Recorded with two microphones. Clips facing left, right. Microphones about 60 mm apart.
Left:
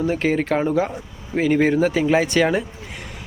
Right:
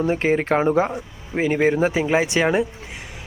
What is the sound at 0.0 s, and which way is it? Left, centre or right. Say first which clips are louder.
Speech: right 1 dB; right.